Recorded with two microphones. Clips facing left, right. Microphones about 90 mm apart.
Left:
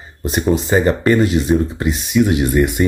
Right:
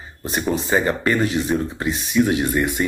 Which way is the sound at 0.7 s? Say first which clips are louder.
Left 5 dB; 40° left (ahead or behind).